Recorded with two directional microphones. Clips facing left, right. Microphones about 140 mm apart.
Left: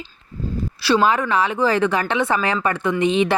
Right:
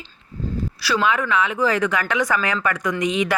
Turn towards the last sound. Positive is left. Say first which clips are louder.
# left 3 dB
turn(degrees=30)  # may be behind; listen again after turning